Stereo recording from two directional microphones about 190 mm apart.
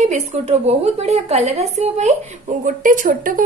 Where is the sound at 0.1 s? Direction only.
35° right (ahead or behind).